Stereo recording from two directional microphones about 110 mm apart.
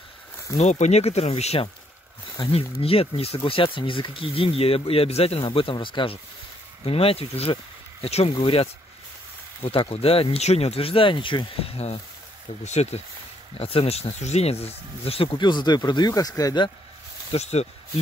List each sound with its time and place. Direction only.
0.6 s speech: 90° left; by 1.7 s 75° left (ahead or behind)
2.5 s speech: 60° left (ahead or behind)
6.8 s speech: 60° left (ahead or behind)
12.6 s speech: 90° left
13.6 s speech: 60° left (ahead or behind); by 16.6 s 35° left (ahead or behind)
17.3 s speech: 80° left